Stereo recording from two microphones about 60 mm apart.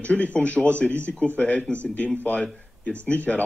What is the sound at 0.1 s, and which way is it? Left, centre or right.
Speech, left.